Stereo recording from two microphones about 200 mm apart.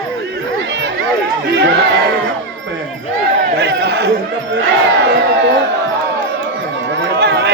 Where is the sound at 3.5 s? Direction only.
55° right (ahead or behind).